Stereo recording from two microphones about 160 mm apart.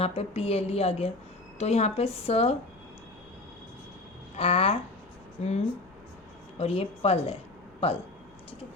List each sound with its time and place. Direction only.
0.0 s speech: 40° left (ahead or behind)
4.4 s speech: 35° left (ahead or behind)